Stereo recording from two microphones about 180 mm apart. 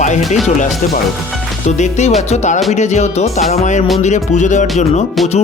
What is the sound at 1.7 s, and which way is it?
Speech, 40° left (ahead or behind).